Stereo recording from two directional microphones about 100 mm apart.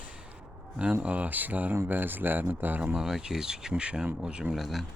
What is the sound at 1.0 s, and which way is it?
Speech, 15° right (ahead or behind).